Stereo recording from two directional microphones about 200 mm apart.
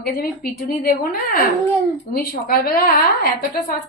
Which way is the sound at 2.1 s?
50° left (ahead or behind).